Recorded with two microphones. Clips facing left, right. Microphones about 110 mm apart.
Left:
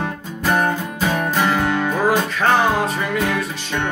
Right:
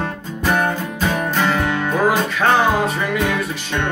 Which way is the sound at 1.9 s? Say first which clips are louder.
Right 1 dB; centre (ahead or behind).